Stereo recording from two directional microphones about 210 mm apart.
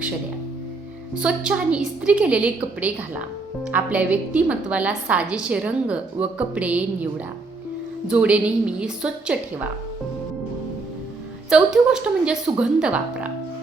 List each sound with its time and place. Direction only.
1.1 s a woman's voice: 5° right (ahead or behind)
3.7 s a woman's voice: 10° right (ahead or behind)
11.4 s a woman's voice: 5° right (ahead or behind)